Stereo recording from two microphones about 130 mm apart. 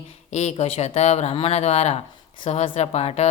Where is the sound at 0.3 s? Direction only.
60° left (ahead or behind).